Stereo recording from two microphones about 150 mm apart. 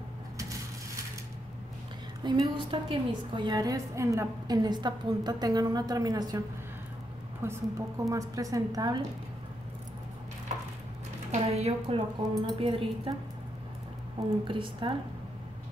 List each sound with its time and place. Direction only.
2.2 s a woman's voice: 30° right (ahead or behind)
7.4 s a woman's voice: 20° right (ahead or behind)
11.3 s speech: 45° right (ahead or behind)
12.4 s a woman's voice: 30° right (ahead or behind)
14.2 s a woman's voice: 35° right (ahead or behind)